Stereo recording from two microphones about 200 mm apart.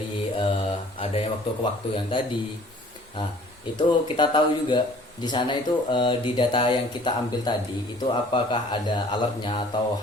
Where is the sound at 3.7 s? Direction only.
25° left (ahead or behind).